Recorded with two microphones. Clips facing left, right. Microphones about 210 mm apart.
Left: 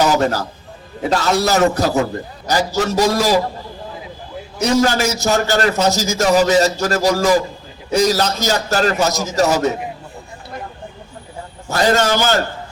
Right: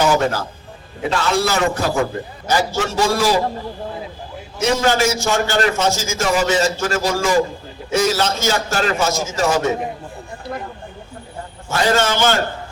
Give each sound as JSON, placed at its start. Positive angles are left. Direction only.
{"t": 0.0, "sound": "a man's voice", "side_deg": 40}
{"t": 4.6, "sound": "a man's voice", "side_deg": 40}
{"t": 11.7, "sound": "a man's voice", "side_deg": 40}